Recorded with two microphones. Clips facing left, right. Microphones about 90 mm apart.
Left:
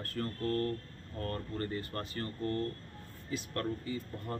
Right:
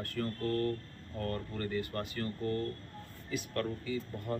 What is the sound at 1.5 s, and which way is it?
Speech, 35° left (ahead or behind).